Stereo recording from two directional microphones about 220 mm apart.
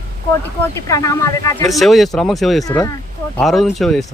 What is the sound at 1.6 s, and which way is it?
Speech, centre (ahead or behind).